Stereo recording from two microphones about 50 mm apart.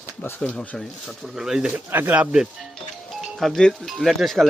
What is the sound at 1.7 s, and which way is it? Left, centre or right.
Speech, right.